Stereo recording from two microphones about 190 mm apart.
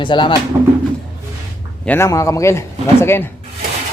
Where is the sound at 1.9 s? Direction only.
15° left (ahead or behind).